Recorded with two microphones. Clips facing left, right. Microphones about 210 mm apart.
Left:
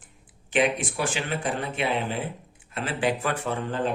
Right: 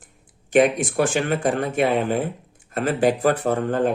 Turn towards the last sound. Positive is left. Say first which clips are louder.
# right 7 dB
turn(degrees=-50)  # may be behind; listen again after turning